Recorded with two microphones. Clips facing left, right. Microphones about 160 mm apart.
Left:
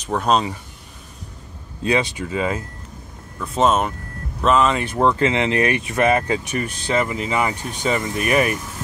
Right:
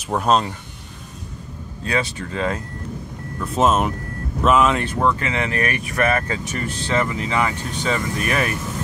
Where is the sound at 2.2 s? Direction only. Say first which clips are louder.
Left 1 dB; 5° left (ahead or behind).